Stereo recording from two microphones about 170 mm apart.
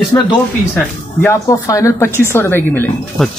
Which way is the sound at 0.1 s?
15° left (ahead or behind).